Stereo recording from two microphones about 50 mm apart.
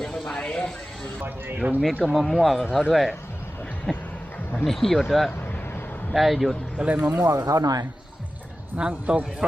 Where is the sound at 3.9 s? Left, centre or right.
Centre.